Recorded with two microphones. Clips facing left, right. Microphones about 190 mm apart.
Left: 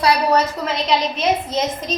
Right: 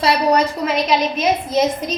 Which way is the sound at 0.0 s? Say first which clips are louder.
Right 1 dB; 15° right (ahead or behind).